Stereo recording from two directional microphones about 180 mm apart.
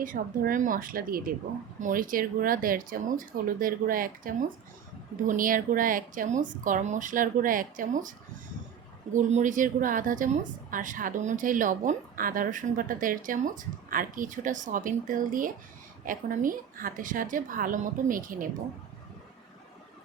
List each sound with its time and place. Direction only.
0.0 s a woman's voice: 50° right (ahead or behind)
9.1 s a woman's voice: 45° right (ahead or behind)